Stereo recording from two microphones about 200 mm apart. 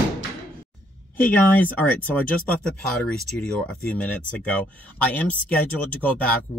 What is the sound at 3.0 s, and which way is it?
Speech, 5° left (ahead or behind).